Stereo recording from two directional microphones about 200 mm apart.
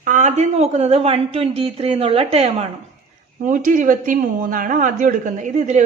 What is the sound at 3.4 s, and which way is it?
Speech, 40° right (ahead or behind).